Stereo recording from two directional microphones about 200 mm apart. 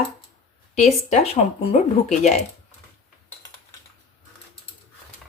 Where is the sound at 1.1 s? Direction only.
30° left (ahead or behind).